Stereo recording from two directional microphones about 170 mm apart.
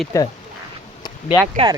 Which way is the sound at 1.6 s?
35° right (ahead or behind).